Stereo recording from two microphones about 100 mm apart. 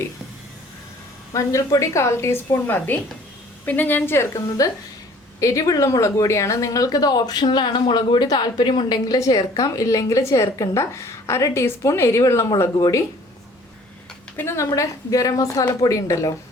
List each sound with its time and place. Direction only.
1.3 s a woman's voice: 35° left (ahead or behind)
4.6 s a woman's voice: 35° left (ahead or behind)
14.3 s speech: 25° left (ahead or behind)